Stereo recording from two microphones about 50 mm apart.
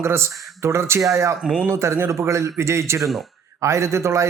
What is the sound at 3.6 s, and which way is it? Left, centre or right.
Speech, right.